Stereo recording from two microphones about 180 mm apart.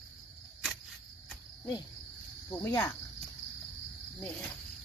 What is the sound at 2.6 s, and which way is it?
Speech, 15° left (ahead or behind).